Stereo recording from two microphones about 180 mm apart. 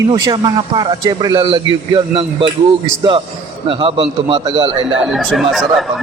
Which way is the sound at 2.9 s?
25° right (ahead or behind).